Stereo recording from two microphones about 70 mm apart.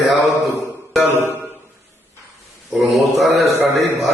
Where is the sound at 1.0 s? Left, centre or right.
Right.